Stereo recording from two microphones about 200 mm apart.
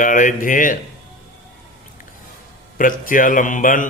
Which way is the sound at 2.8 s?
45° left (ahead or behind).